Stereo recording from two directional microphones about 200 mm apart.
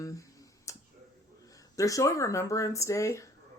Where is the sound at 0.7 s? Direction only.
15° left (ahead or behind).